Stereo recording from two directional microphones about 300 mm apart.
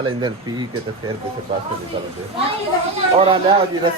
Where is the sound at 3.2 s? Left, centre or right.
Centre.